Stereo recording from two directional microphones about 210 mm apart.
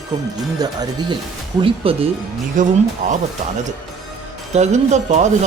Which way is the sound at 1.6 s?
25° right (ahead or behind).